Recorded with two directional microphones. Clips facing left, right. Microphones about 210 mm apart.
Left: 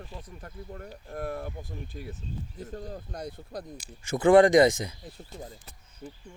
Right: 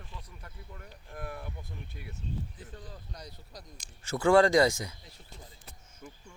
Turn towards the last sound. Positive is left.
turn(degrees=30)  # may be behind; listen again after turning